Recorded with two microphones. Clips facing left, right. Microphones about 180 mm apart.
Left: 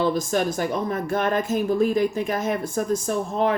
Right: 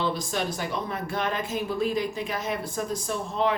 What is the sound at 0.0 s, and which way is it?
Speech, 45° left (ahead or behind).